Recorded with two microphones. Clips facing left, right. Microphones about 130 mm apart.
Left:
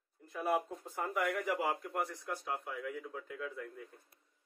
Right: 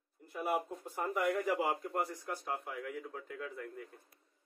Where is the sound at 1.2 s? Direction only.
30° right (ahead or behind).